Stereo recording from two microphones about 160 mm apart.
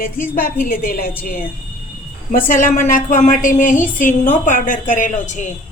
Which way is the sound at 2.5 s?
55° left (ahead or behind).